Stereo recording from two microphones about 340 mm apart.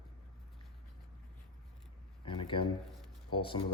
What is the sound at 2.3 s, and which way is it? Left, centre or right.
A man's voice, centre.